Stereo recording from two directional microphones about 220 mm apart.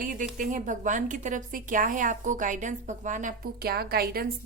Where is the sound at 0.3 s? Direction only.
35° right (ahead or behind).